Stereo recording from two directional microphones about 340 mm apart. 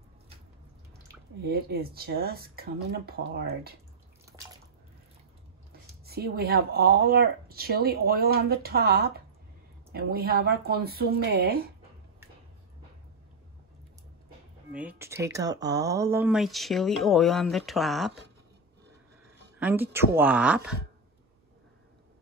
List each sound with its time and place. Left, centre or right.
1.4 s speech: right
5.7 s speech: right
14.7 s speech: centre
19.6 s speech: centre